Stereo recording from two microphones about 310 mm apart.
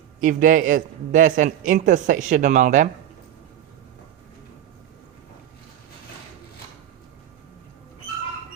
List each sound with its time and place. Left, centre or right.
0.2 s speech: right